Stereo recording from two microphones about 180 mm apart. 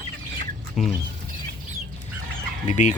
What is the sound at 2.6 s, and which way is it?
Speech, 40° left (ahead or behind).